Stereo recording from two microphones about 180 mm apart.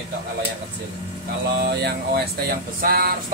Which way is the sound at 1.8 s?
60° right (ahead or behind).